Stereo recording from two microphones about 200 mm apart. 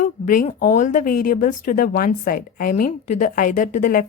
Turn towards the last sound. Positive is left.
turn(degrees=40)  # may be behind; listen again after turning